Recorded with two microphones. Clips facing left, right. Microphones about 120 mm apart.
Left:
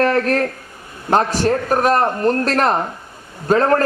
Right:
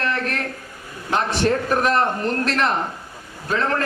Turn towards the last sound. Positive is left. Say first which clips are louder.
# left 8 dB
turn(degrees=45)  # may be behind; listen again after turning